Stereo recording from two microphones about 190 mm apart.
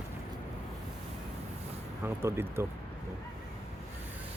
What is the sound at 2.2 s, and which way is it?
Speech, 15° right (ahead or behind).